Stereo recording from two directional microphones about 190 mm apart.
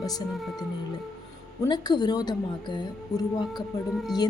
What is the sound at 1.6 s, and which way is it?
A woman's voice, 20° left (ahead or behind).